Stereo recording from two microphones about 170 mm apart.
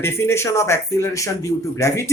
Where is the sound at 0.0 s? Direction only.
15° left (ahead or behind).